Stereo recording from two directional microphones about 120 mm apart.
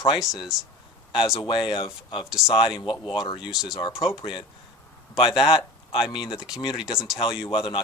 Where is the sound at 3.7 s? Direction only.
40° left (ahead or behind).